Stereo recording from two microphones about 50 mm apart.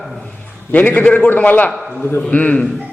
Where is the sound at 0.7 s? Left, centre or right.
Left.